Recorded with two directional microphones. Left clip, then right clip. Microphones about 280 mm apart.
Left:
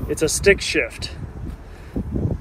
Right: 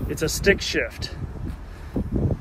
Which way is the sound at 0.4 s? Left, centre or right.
Centre.